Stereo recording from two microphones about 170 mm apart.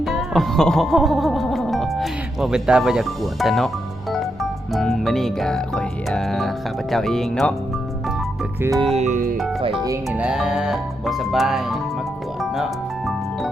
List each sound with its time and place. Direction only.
0.0 s music: centre (ahead or behind)
4.7 s speech: centre (ahead or behind)
9.0 s music: 45° right (ahead or behind)
10.1 s speech: 5° right (ahead or behind)